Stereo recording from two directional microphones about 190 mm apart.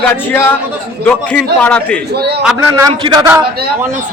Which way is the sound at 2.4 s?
5° right (ahead or behind).